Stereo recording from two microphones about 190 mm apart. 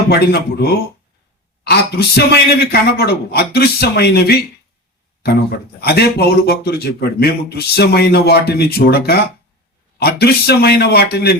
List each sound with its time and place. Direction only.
0.1 s speech: 60° left (ahead or behind)